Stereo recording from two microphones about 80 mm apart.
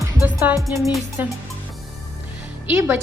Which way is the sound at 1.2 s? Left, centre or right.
Right.